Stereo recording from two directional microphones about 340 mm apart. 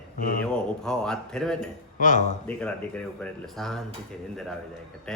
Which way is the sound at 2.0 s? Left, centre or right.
Left.